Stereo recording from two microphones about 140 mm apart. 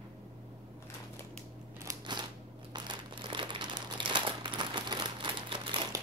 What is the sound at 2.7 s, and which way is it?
Crumpling, 30° right (ahead or behind).